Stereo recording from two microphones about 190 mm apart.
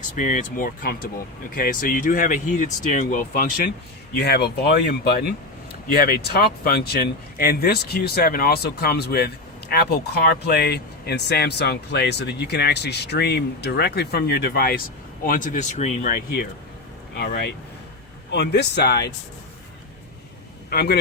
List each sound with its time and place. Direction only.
0.2 s speech: 40° left (ahead or behind)
4.2 s speech: 60° left (ahead or behind); by 16.1 s 40° left (ahead or behind)
16.1 s speech: 55° left (ahead or behind)
20.7 s a man's voice: 55° left (ahead or behind)